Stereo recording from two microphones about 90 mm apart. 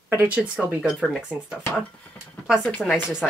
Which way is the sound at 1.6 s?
20° left (ahead or behind).